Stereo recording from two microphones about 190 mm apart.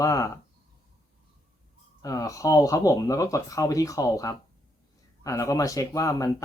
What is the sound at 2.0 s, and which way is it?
Speech, 15° left (ahead or behind).